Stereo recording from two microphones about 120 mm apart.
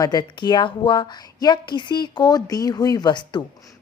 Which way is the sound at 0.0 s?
35° left (ahead or behind).